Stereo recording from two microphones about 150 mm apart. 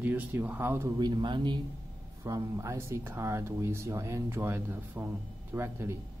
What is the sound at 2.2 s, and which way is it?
Speech, 20° right (ahead or behind).